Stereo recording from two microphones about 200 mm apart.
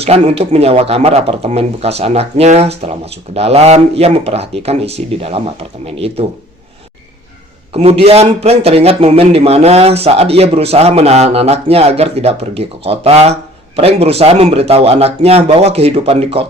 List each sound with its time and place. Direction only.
0.0 s a man's voice: 30° right (ahead or behind)
7.7 s a man's voice: 30° right (ahead or behind)